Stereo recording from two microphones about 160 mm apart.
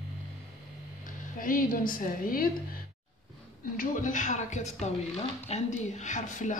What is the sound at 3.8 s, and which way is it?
A woman's voice, 55° left (ahead or behind).